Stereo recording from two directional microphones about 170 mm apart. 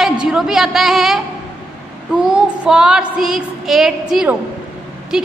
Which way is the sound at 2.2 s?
5° right (ahead or behind).